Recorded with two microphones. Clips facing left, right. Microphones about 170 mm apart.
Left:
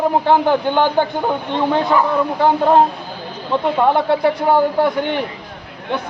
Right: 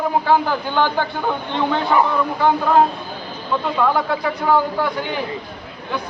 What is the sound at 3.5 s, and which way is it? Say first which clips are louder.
A man's voice: left 4 dB; 25° left (ahead or behind).